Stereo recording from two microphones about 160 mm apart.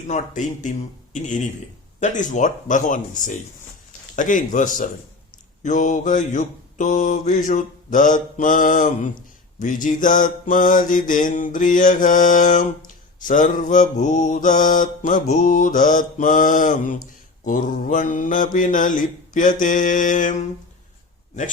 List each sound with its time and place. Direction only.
0.1 s mantra: 50° left (ahead or behind)